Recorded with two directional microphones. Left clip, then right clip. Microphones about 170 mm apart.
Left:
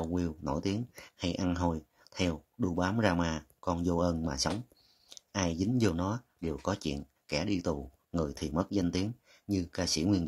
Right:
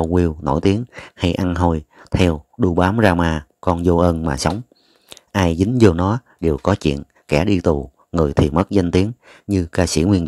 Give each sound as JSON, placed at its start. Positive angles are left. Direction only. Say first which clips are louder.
{"t": 0.0, "sound": "speech", "louder": "right 16 dB", "side_deg": -45}
{"t": 5.1, "sound": "a sound", "louder": "right 14 dB", "side_deg": -50}
{"t": 5.8, "sound": "speech", "louder": "right 19 dB", "side_deg": -45}